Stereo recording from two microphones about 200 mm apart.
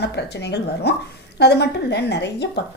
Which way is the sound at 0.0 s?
60° left (ahead or behind).